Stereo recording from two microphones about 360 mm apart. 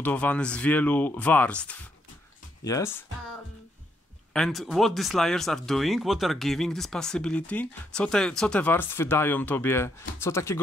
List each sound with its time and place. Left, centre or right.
0.0 s speech: centre
4.3 s speech: centre